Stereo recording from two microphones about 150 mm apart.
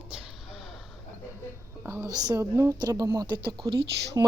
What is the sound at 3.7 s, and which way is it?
Speech, 90° right.